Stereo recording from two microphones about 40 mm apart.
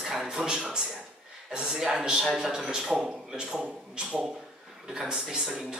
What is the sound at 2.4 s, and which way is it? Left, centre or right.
A man's voice, right.